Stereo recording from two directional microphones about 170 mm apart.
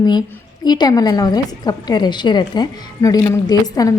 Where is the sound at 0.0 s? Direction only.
25° left (ahead or behind).